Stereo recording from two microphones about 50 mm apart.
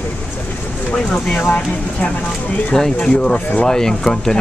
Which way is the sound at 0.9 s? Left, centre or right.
Centre.